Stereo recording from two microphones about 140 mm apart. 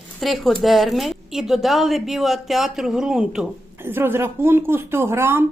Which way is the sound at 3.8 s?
15° right (ahead or behind).